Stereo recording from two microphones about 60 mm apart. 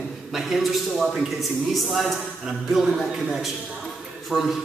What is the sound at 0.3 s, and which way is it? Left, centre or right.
A man's voice, centre.